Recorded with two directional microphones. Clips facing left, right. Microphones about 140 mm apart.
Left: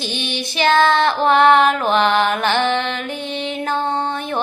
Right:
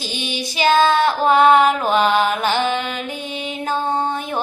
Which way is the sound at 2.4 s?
10° right (ahead or behind).